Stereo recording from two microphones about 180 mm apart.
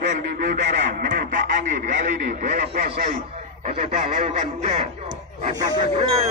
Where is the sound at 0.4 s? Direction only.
60° right (ahead or behind).